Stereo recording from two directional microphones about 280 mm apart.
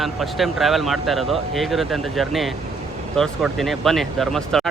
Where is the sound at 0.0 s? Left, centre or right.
Centre.